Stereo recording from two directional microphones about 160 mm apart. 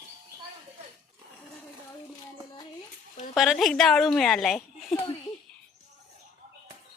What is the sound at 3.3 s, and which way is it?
A woman's voice, centre (ahead or behind).